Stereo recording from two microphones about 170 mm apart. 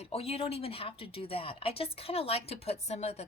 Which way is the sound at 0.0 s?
35° left (ahead or behind).